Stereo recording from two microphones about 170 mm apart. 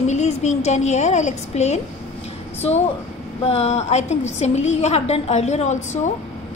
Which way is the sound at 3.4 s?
40° left (ahead or behind).